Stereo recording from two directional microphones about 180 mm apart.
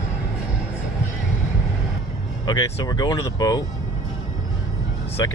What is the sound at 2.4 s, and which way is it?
Speech, 20° left (ahead or behind).